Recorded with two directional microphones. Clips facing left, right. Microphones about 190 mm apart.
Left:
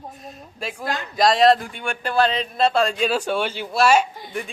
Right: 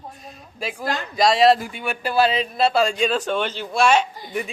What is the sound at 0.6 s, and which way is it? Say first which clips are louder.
A man's voice: right 2 dB; centre (ahead or behind).